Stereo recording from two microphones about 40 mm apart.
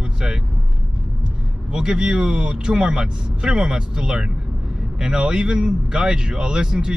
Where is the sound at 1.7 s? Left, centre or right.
Right.